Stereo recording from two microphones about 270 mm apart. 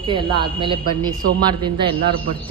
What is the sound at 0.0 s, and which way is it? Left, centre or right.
A man's voice, centre.